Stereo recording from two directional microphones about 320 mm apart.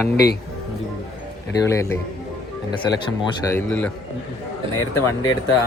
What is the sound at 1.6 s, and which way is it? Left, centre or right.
Speech, centre.